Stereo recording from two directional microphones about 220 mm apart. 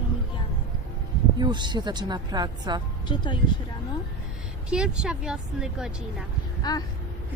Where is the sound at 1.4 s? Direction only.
20° right (ahead or behind).